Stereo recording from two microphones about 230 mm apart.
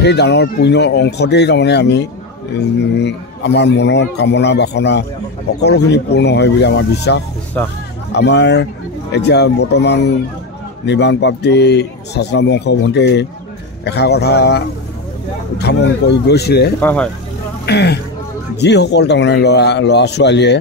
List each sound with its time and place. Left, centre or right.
0.0 s a man's voice: left
7.6 s speech: centre
8.1 s a man's voice: left
15.6 s a man's voice: left
16.8 s speech: centre
17.6 s a man's voice: left